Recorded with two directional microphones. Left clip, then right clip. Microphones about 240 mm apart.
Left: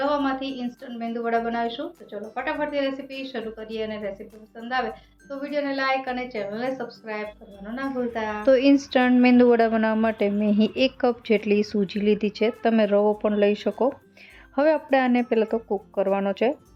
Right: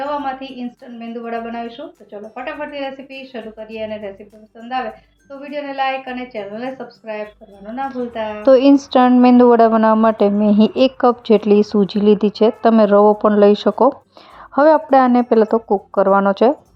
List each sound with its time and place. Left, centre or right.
0.0 s a woman's voice: centre
5.3 s a woman's voice: centre
8.4 s a woman's voice: centre